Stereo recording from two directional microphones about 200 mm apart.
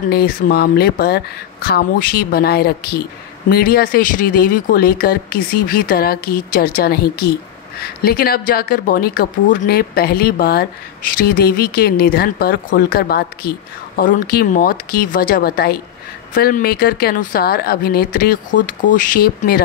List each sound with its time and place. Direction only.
0.1 s speech: 50° left (ahead or behind)